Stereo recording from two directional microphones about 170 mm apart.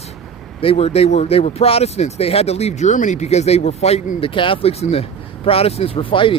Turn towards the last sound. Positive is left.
turn(degrees=30)  # may be behind; listen again after turning